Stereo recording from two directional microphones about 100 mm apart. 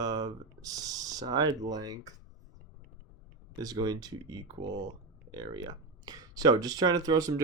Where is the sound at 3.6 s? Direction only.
40° right (ahead or behind).